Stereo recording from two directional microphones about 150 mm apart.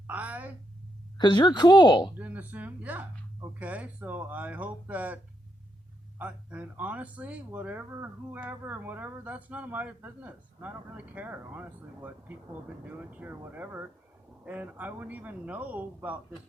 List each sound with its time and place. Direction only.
0.1 s speech: 10° right (ahead or behind)
1.2 s speech: 30° left (ahead or behind)
2.1 s speech: 10° right (ahead or behind)